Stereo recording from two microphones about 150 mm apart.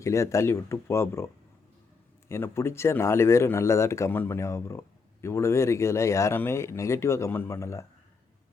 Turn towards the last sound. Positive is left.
turn(degrees=20)  # may be behind; listen again after turning